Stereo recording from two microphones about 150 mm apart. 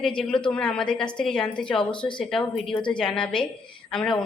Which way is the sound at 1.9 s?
30° left (ahead or behind).